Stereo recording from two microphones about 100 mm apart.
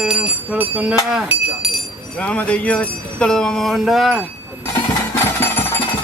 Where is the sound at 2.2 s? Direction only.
10° left (ahead or behind).